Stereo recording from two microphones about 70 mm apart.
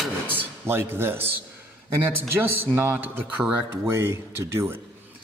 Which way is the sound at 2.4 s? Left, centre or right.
Right.